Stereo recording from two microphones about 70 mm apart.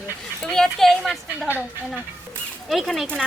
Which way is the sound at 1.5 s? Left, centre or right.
Right.